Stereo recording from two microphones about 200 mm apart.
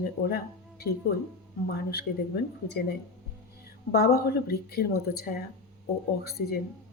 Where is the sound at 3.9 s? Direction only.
50° left (ahead or behind).